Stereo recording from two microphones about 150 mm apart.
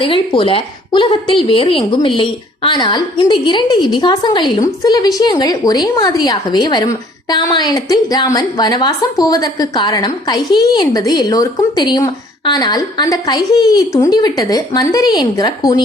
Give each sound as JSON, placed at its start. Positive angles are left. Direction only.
{"t": 0.0, "sound": "a woman's voice", "side_deg": 35}